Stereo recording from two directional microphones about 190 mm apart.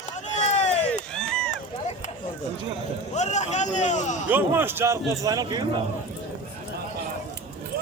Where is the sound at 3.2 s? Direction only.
35° left (ahead or behind).